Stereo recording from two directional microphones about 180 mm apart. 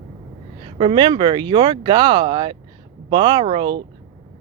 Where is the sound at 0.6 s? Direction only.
30° right (ahead or behind).